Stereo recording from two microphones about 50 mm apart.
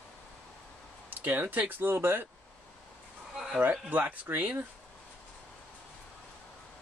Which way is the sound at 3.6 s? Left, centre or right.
Right.